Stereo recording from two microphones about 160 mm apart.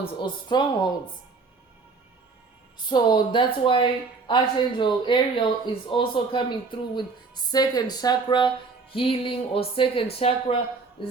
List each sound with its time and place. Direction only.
0.0 s speech: 30° left (ahead or behind)
2.9 s a woman's voice: 30° left (ahead or behind)